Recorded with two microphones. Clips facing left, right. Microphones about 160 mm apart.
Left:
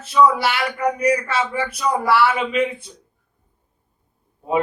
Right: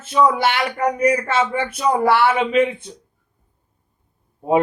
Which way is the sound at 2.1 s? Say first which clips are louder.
Right 2 dB; 25° right (ahead or behind).